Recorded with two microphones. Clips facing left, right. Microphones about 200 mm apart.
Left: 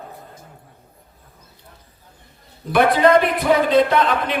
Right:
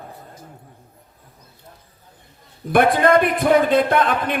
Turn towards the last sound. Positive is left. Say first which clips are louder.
# even
turn(degrees=-50)  # may be behind; listen again after turning